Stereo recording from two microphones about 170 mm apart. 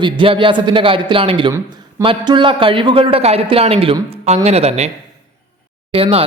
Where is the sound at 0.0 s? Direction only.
30° right (ahead or behind).